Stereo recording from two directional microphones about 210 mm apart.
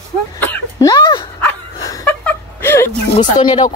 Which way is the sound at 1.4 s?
10° left (ahead or behind).